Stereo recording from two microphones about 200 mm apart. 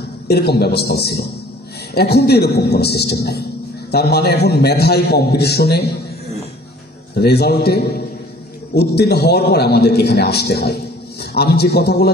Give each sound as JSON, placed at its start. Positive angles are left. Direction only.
{"t": 0.3, "sound": "a man's voice", "side_deg": 55}
{"t": 7.2, "sound": "a man's voice", "side_deg": 55}